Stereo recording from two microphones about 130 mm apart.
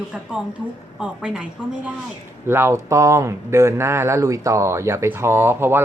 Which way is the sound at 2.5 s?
20° right (ahead or behind).